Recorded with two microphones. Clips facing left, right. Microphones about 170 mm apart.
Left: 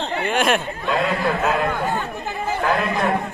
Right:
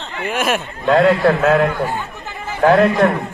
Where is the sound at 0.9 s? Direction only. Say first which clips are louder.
Right 9 dB; 80° right.